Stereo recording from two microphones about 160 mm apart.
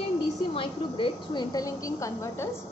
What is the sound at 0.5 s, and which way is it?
A woman's voice, 30° left (ahead or behind).